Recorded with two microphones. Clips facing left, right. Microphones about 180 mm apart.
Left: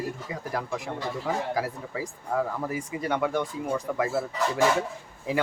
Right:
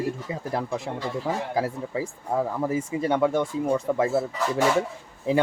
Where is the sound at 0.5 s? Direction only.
25° right (ahead or behind).